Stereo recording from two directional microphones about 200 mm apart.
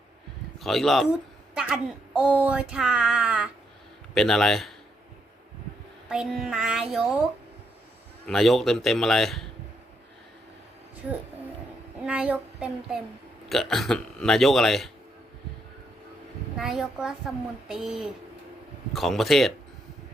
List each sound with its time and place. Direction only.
0.6 s a woman's voice: centre (ahead or behind)
6.1 s speech: centre (ahead or behind)
8.3 s speech: centre (ahead or behind)
12.0 s speech: 5° right (ahead or behind)
16.6 s speech: centre (ahead or behind)